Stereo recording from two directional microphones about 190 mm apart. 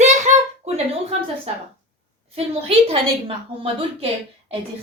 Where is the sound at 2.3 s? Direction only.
30° right (ahead or behind).